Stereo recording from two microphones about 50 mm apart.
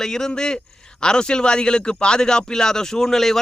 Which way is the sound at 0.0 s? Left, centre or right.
Centre.